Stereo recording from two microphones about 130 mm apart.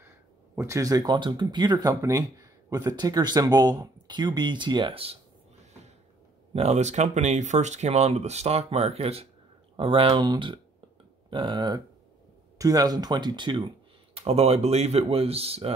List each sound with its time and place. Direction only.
0.6 s speech: 25° right (ahead or behind); by 5.1 s 40° right (ahead or behind)
6.5 s speech: 55° right (ahead or behind); by 13.7 s 35° right (ahead or behind)
14.1 s speech: 50° right (ahead or behind)